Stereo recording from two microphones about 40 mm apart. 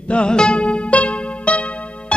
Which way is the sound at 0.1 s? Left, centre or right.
Left.